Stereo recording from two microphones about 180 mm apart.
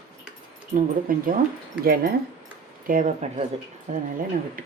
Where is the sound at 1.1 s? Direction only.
50° right (ahead or behind).